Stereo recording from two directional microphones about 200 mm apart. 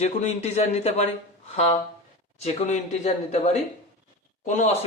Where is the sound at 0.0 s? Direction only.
35° left (ahead or behind).